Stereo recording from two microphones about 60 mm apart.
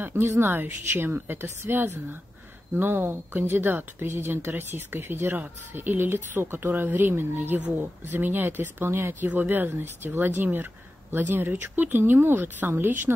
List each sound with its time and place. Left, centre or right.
0.0 s a woman's voice: right
5.3 s a woman's voice: right
9.3 s a woman's voice: right